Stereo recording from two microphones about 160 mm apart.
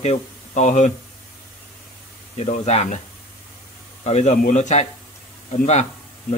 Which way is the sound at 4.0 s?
45° left (ahead or behind).